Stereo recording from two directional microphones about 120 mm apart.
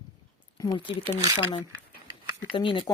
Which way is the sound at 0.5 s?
40° left (ahead or behind).